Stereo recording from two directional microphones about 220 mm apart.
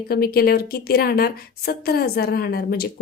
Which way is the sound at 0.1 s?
45° left (ahead or behind).